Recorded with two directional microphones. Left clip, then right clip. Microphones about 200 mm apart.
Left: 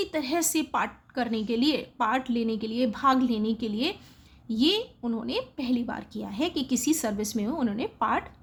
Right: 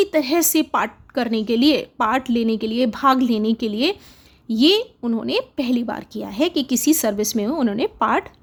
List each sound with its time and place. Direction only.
0.0 s a woman's voice: 35° right (ahead or behind)